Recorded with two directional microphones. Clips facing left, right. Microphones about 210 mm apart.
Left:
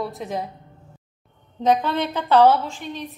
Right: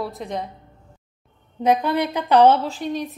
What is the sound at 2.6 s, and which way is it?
Speech, 40° right (ahead or behind).